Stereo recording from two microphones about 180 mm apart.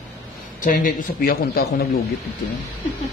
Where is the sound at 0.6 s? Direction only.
50° left (ahead or behind).